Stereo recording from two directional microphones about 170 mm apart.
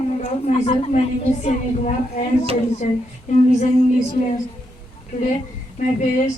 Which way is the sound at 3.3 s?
45° left (ahead or behind).